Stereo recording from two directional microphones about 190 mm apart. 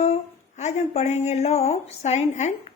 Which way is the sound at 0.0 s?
35° left (ahead or behind).